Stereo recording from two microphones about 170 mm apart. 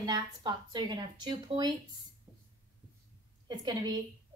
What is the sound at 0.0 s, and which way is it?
Speech, 25° right (ahead or behind).